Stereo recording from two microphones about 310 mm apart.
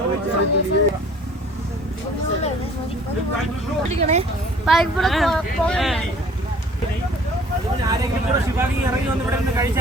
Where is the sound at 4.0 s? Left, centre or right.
Right.